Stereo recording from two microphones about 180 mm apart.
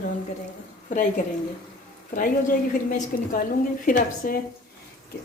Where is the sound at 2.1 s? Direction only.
50° left (ahead or behind).